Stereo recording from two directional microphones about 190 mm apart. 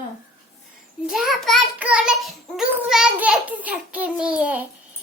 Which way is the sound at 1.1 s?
Centre (ahead or behind).